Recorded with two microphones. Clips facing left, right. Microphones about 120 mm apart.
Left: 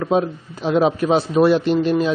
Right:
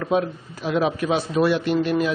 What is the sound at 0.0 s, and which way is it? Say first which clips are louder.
A man's voice: left 3 dB; 25° left (ahead or behind).